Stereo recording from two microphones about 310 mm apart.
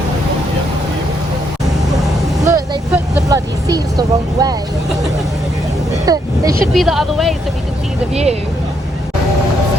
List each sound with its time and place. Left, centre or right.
2.5 s vehicle: centre
6.1 s speech: centre
6.7 s speech: centre
8.1 s speech: centre